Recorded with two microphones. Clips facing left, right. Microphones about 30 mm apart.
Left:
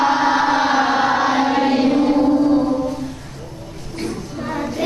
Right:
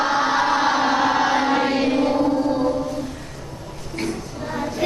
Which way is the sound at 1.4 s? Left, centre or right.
Centre.